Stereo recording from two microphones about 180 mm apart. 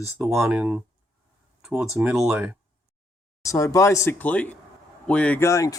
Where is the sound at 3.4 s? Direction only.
20° left (ahead or behind).